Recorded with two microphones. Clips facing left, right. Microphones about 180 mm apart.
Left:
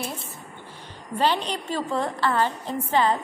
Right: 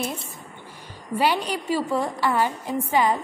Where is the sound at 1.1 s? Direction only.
10° right (ahead or behind).